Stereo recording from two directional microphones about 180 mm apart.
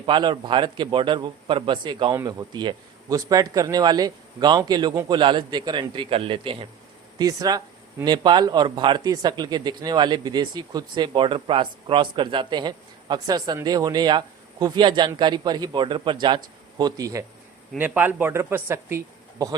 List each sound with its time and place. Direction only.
0.0 s speech: 25° right (ahead or behind)